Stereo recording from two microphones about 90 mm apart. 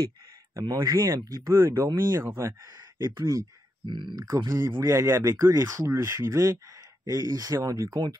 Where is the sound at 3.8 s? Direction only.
55° right (ahead or behind).